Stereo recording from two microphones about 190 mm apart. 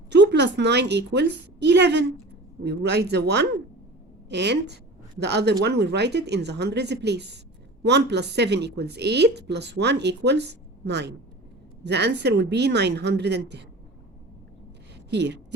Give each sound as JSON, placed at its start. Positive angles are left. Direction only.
{"t": 0.1, "sound": "a woman's voice", "side_deg": -65}
{"t": 15.1, "sound": "a woman's voice", "side_deg": -65}